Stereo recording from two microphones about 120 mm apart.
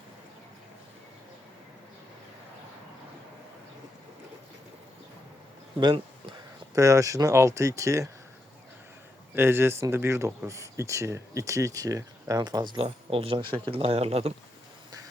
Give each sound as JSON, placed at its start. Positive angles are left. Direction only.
{"t": 5.8, "sound": "a sound", "side_deg": -40}
{"t": 6.7, "sound": "speech", "side_deg": -25}
{"t": 9.3, "sound": "speech", "side_deg": -20}